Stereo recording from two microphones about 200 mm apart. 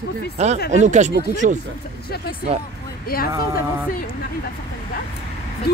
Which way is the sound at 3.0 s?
50° left (ahead or behind).